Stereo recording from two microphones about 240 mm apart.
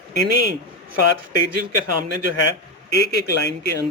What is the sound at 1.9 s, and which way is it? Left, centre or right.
Speech, right.